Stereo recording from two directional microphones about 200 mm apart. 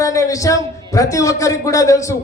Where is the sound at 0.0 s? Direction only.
15° left (ahead or behind).